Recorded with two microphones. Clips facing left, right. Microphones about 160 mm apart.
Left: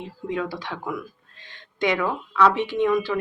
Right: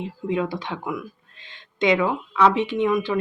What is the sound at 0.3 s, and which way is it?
Speech, 20° right (ahead or behind).